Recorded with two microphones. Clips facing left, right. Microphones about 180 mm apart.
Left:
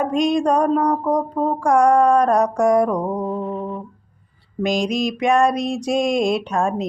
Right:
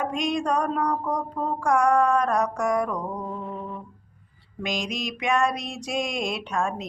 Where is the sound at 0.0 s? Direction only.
35° left (ahead or behind).